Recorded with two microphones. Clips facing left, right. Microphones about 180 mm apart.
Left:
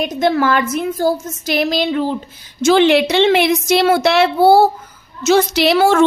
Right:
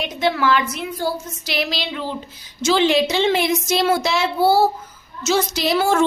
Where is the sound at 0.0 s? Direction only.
45° left (ahead or behind).